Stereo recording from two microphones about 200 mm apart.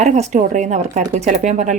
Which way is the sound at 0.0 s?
35° right (ahead or behind).